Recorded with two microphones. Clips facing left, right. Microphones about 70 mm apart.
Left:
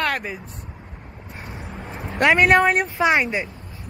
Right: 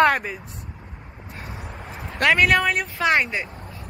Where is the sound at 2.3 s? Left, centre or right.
Left.